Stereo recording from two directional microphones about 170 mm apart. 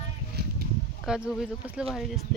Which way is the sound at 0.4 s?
70° right (ahead or behind).